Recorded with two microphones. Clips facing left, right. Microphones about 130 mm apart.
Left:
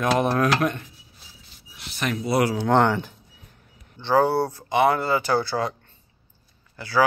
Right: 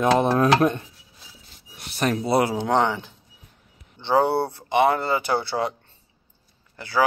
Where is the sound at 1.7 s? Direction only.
40° right (ahead or behind); by 2.7 s 20° right (ahead or behind).